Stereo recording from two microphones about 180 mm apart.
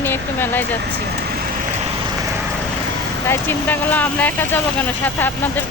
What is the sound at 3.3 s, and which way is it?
Speech, 10° left (ahead or behind).